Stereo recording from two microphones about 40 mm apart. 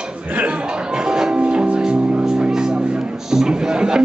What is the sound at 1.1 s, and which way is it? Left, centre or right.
Music, centre.